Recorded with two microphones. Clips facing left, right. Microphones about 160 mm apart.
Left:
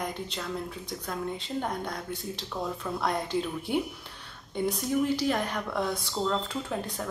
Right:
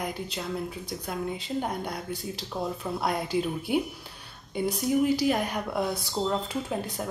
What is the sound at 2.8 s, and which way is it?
A woman's voice, 10° right (ahead or behind).